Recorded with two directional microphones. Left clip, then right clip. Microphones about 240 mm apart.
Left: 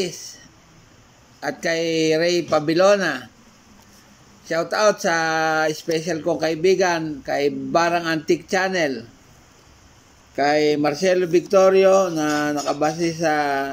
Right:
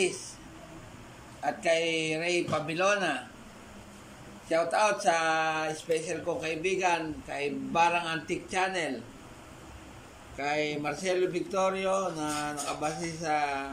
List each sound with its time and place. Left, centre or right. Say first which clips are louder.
0.0 s speech: left 3 dB; left
1.4 s speech: left 5 dB; left
4.5 s speech: left 7 dB; left
10.3 s speech: left 13 dB; left